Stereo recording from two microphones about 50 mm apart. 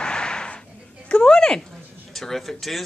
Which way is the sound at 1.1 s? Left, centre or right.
Centre.